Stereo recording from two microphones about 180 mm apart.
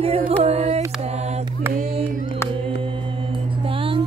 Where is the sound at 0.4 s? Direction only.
35° right (ahead or behind).